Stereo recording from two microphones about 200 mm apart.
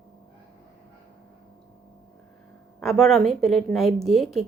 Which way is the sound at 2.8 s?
Centre (ahead or behind).